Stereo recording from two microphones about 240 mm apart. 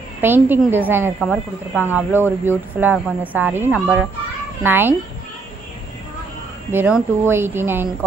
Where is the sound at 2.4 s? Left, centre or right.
Centre.